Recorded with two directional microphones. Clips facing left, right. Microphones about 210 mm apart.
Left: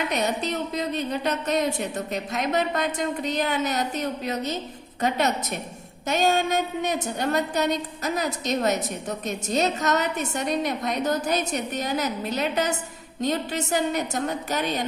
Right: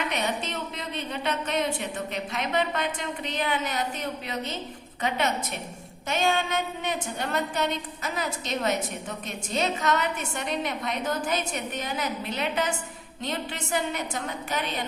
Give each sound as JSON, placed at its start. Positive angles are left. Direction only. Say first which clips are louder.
{"t": 0.1, "sound": "a woman's voice", "louder": "left 4 dB", "side_deg": 40}